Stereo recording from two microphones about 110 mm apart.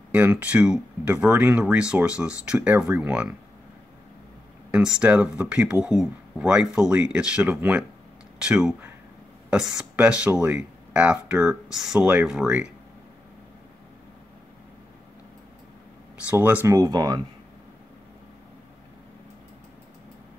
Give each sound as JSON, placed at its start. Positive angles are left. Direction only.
{"t": 0.1, "sound": "speech", "side_deg": -10}
{"t": 4.6, "sound": "speech", "side_deg": -5}
{"t": 16.3, "sound": "speech", "side_deg": -15}
{"t": 16.6, "sound": "speech", "side_deg": -30}